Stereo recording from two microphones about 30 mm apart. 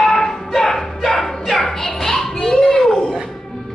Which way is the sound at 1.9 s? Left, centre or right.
Centre.